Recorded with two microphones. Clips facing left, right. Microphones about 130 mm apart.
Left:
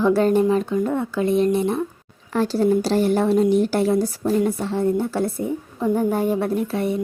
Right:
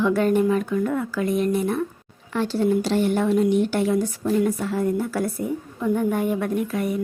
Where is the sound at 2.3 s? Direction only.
40° left (ahead or behind).